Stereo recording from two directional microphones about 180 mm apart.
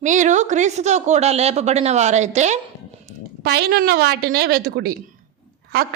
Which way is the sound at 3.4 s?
60° right (ahead or behind).